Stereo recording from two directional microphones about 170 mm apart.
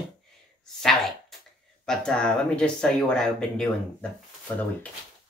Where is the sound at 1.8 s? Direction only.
5° left (ahead or behind).